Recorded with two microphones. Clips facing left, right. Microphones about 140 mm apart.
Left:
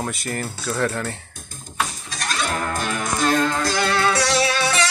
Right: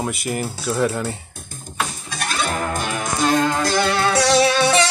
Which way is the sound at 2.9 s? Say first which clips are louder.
Right 1 dB; centre (ahead or behind).